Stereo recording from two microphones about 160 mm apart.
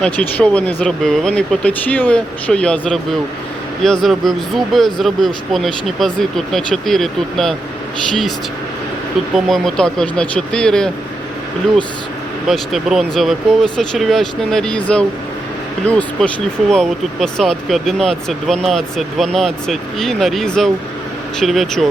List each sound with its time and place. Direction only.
0.0 s speech: 10° left (ahead or behind)
9.3 s speech: centre (ahead or behind)
12.5 s speech: centre (ahead or behind)